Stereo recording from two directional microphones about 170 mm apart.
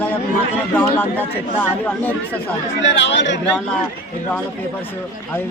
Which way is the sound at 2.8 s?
90° left.